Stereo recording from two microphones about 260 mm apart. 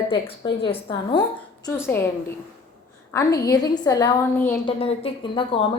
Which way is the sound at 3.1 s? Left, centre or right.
Centre.